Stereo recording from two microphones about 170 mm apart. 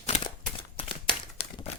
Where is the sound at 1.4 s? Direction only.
35° left (ahead or behind).